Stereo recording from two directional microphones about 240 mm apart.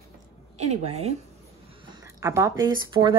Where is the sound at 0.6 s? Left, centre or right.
Right.